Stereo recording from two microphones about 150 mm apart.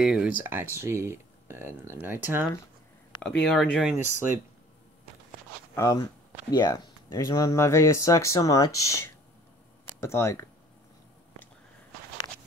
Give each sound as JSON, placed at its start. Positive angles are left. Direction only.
{"t": 0.0, "sound": "speech", "side_deg": -5}
{"t": 3.2, "sound": "speech", "side_deg": 5}
{"t": 3.9, "sound": "speech", "side_deg": -15}
{"t": 5.8, "sound": "speech", "side_deg": 20}